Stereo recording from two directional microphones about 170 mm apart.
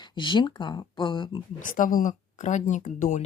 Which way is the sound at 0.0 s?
25° left (ahead or behind).